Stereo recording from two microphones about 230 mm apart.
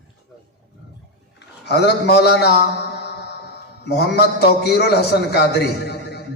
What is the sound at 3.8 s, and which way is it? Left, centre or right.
A man's voice, left.